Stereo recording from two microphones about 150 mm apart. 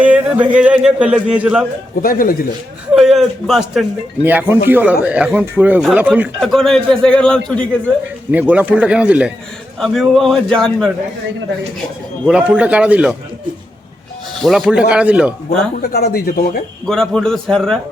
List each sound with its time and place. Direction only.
0.0 s speech: 10° right (ahead or behind)
2.0 s speech: 70° left (ahead or behind)
2.9 s a man's voice: centre (ahead or behind)
4.2 s speech: 15° right (ahead or behind)
6.4 s a man's voice: 5° left (ahead or behind)
8.3 s a man's voice: 10° right (ahead or behind)
12.3 s speech: 10° right (ahead or behind)
14.3 s speech: centre (ahead or behind)
15.9 s speech: 90° left
16.8 s a man's voice: 5° left (ahead or behind)